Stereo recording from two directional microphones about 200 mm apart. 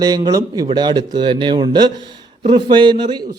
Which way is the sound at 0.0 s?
20° right (ahead or behind).